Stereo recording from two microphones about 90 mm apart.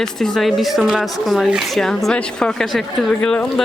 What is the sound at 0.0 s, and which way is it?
Speech, 5° left (ahead or behind).